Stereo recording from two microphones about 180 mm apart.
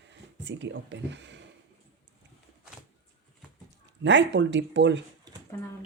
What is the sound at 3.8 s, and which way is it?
Speech, 85° right.